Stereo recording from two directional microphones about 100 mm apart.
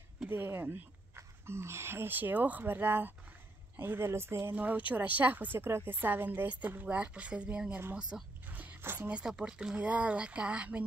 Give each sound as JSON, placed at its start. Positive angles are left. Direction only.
{"t": 0.3, "sound": "speech", "side_deg": -25}
{"t": 8.1, "sound": "a sound", "side_deg": -15}
{"t": 9.2, "sound": "speech", "side_deg": -5}